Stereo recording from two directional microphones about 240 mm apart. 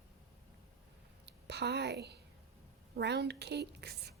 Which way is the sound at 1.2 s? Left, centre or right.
Right.